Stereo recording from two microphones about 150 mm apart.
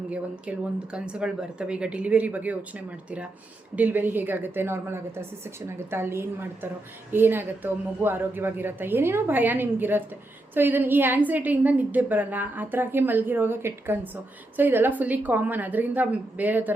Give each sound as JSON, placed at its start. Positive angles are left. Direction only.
{"t": 0.9, "sound": "a woman's voice", "side_deg": -5}
{"t": 3.8, "sound": "a woman's voice", "side_deg": -10}